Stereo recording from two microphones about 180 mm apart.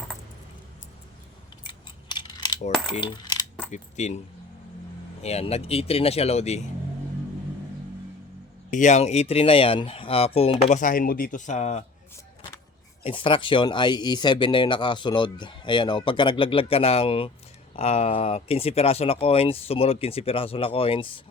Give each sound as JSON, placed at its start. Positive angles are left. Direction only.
{"t": 1.6, "sound": "a sound", "side_deg": 25}
{"t": 3.0, "sound": "coin", "side_deg": 25}
{"t": 3.7, "sound": "speech", "side_deg": 40}
{"t": 5.2, "sound": "speech", "side_deg": 35}
{"t": 8.7, "sound": "speech", "side_deg": 40}
{"t": 13.0, "sound": "speech", "side_deg": 30}